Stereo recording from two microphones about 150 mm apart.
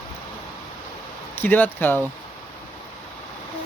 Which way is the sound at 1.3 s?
15° left (ahead or behind).